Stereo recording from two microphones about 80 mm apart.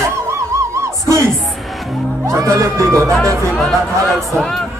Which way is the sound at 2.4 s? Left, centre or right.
Right.